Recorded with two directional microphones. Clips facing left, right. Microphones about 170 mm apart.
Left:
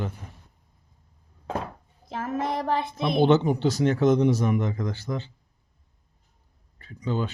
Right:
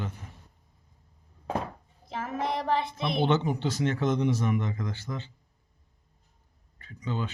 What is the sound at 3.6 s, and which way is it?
Speech, 40° left (ahead or behind).